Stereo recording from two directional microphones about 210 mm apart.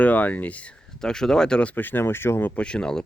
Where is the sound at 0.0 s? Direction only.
5° left (ahead or behind).